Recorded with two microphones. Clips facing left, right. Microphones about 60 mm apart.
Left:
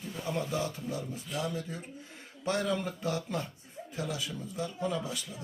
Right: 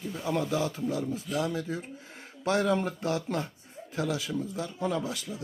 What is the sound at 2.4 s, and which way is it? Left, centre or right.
Speech, right.